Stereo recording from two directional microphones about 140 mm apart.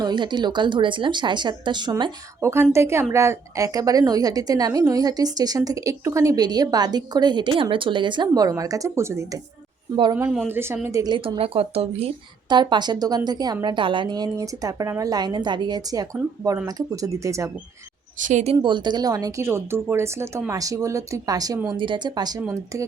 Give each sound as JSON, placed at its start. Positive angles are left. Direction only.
{"t": 0.0, "sound": "speech", "side_deg": -30}
{"t": 2.4, "sound": "a woman's voice", "side_deg": -20}
{"t": 9.9, "sound": "speech", "side_deg": -35}
{"t": 10.5, "sound": "a woman's voice", "side_deg": -15}
{"t": 12.5, "sound": "a woman's voice", "side_deg": -30}
{"t": 18.2, "sound": "speech", "side_deg": -60}
{"t": 18.5, "sound": "a woman's voice", "side_deg": -35}